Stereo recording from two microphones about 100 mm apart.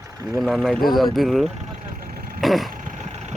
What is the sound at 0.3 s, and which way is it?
Speech, centre (ahead or behind).